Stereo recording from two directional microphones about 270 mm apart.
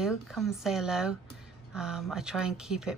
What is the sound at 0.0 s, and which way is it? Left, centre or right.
Speech, centre.